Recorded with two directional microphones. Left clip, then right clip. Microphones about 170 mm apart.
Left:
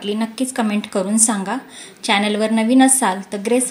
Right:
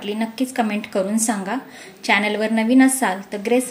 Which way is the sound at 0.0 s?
45° left (ahead or behind).